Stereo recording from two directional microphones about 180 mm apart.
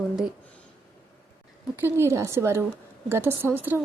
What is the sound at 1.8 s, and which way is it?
Speech, 15° right (ahead or behind).